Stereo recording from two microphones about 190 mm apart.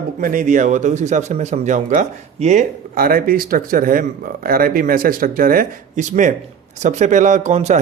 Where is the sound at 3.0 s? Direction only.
50° right (ahead or behind).